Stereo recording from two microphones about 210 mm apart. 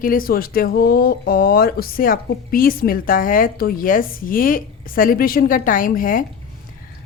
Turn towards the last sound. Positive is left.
turn(degrees=40)  # may be behind; listen again after turning